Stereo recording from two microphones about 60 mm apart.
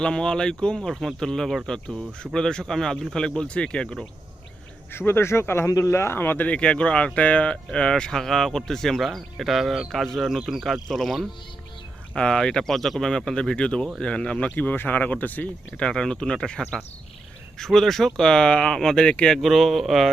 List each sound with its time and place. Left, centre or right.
0.0 s speech: centre
4.9 s speech: left
5.6 s speech: left
6.1 s speech: left
6.6 s speech: centre
8.2 s speech: centre; by 15.4 s left
15.7 s speech: centre
19.4 s speech: centre